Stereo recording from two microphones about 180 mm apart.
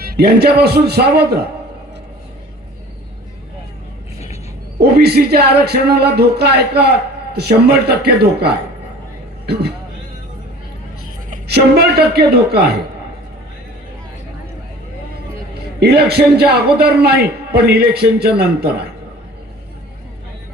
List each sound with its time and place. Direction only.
0.0 s speech: 60° right (ahead or behind)
4.8 s speech: 65° right (ahead or behind)
11.4 s speech: 65° right (ahead or behind)
15.8 s speech: 65° right (ahead or behind)